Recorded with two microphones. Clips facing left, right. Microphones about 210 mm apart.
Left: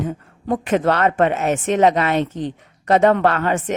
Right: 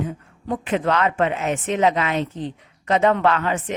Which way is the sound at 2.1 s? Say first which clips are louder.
Left 4 dB; 75° left (ahead or behind).